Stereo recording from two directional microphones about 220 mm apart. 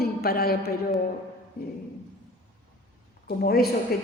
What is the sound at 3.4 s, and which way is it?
Speech, 45° left (ahead or behind).